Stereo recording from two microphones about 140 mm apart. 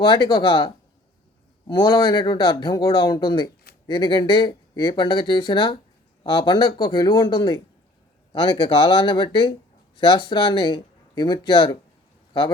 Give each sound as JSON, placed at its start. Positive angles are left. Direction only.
{"t": 0.0, "sound": "speech", "side_deg": 35}
{"t": 1.8, "sound": "speech", "side_deg": 35}